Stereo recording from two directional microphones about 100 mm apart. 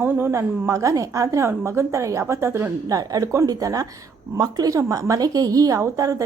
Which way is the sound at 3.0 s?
35° right (ahead or behind).